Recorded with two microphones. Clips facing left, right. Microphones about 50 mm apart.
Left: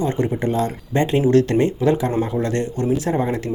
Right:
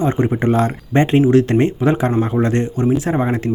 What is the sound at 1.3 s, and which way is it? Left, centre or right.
Speech, right.